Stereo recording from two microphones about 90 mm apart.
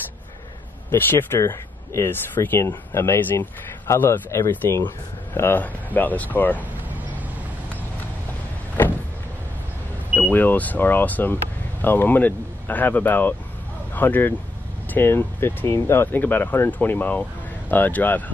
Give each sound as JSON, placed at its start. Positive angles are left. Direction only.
{"t": 0.9, "sound": "speech", "side_deg": 25}
{"t": 8.8, "sound": "vehicle", "side_deg": 20}
{"t": 10.3, "sound": "speech", "side_deg": 20}